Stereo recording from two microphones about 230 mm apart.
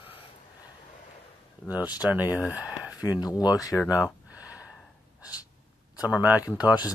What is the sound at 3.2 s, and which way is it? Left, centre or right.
Speech, centre.